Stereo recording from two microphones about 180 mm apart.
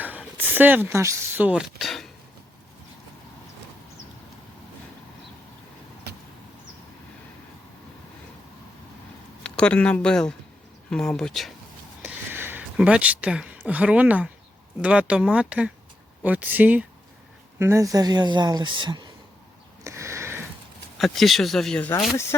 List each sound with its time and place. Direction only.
0.0 s speech: 10° right (ahead or behind)
9.4 s speech: 5° left (ahead or behind)
12.0 s a sound: 10° right (ahead or behind)
14.8 s speech: 5° right (ahead or behind); by 19.1 s 25° right (ahead or behind)
19.8 s a sound: 15° right (ahead or behind)
21.0 s speech: centre (ahead or behind)